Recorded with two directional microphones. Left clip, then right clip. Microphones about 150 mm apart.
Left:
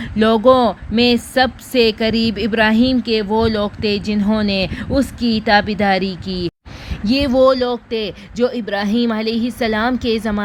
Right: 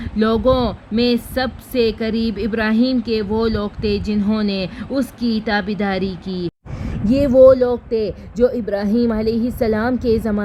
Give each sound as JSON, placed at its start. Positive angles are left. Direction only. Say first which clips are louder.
{"t": 0.0, "sound": "speech", "louder": "left 4 dB", "side_deg": 35}
{"t": 7.0, "sound": "speech", "louder": "even", "side_deg": 20}
{"t": 7.3, "sound": "speech", "louder": "right 4 dB", "side_deg": 35}